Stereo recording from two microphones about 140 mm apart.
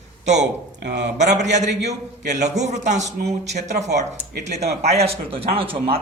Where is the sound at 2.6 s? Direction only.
55° right (ahead or behind); by 6.0 s 40° right (ahead or behind).